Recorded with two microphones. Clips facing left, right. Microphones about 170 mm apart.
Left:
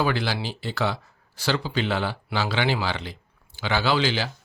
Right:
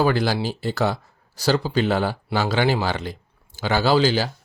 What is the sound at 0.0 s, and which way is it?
A man's voice, 45° right (ahead or behind).